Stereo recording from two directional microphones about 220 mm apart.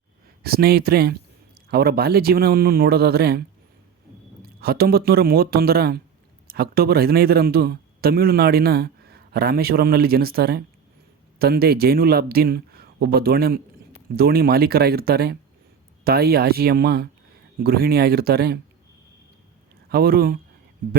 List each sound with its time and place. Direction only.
0.4 s a man's voice: 45° right (ahead or behind)
4.4 s a man's voice: 45° right (ahead or behind)
19.9 s a man's voice: 45° right (ahead or behind)